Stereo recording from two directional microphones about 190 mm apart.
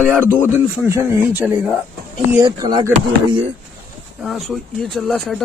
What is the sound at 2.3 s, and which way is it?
Speech, 20° right (ahead or behind).